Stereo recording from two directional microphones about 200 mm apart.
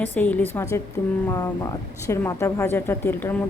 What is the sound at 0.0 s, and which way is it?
Speech, 10° left (ahead or behind).